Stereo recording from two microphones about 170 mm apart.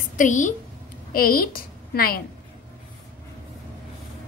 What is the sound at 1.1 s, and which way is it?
A woman's voice, 60° left (ahead or behind).